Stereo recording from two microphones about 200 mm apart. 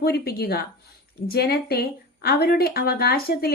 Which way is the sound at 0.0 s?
50° left (ahead or behind).